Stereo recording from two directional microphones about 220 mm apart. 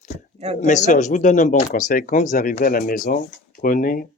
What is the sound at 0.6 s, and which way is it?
Speech, 35° left (ahead or behind).